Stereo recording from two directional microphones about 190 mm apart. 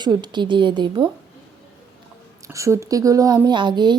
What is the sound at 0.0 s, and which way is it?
Speech, 25° right (ahead or behind).